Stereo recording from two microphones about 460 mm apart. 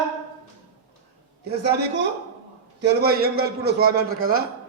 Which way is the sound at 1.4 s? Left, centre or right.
Right.